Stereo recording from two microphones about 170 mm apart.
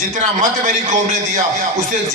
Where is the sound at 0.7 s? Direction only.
50° right (ahead or behind).